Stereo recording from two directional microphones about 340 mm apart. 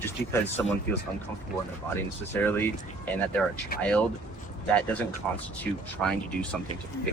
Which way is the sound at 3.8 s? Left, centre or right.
Centre.